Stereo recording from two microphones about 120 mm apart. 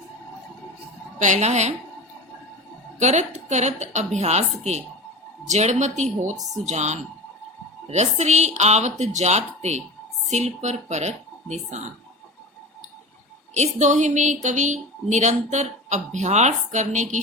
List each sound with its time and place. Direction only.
1.2 s speech: 80° right
3.0 s speech: 75° right (ahead or behind)
13.5 s a woman's voice: 80° right